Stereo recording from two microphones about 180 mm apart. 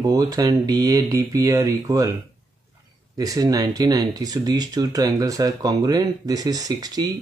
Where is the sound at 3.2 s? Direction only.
20° right (ahead or behind).